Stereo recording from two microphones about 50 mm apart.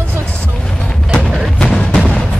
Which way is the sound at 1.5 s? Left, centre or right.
Centre.